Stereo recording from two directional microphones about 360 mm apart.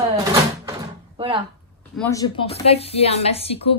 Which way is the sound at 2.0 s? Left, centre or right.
Centre.